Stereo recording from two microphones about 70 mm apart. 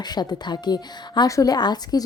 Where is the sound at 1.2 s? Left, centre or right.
Left.